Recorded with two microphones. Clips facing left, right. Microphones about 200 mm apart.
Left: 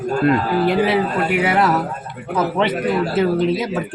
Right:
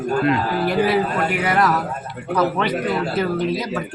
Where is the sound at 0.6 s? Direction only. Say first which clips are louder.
Even; 25° left (ahead or behind).